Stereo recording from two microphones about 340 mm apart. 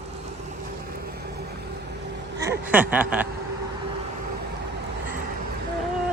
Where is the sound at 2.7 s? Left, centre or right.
Centre.